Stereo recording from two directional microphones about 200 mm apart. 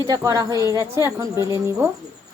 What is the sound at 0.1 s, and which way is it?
A woman's voice, 15° right (ahead or behind).